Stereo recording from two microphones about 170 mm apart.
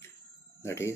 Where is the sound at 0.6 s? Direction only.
15° left (ahead or behind).